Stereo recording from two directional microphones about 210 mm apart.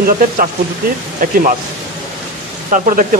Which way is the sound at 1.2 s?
40° right (ahead or behind).